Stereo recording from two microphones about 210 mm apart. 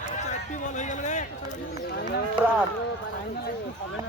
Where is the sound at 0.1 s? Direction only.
35° left (ahead or behind).